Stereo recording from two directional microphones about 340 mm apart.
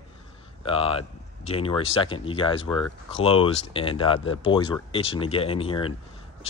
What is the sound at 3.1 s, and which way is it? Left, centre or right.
Speech, centre.